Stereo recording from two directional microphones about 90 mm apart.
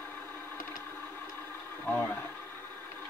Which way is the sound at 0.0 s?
20° left (ahead or behind).